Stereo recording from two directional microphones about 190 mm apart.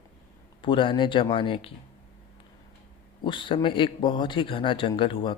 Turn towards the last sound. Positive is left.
turn(degrees=25)  # may be behind; listen again after turning